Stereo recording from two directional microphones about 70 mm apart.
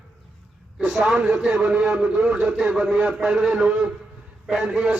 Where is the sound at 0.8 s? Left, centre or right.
Centre.